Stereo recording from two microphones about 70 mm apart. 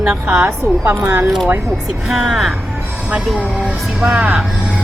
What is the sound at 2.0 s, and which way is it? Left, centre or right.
Speech, centre.